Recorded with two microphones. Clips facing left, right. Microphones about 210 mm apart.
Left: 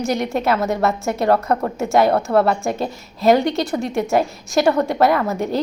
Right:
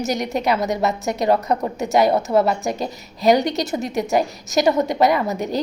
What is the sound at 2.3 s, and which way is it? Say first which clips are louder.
A woman's voice: left 1 dB; centre (ahead or behind).